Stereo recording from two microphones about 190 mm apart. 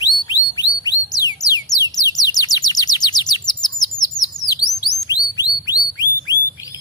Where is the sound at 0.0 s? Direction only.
20° left (ahead or behind).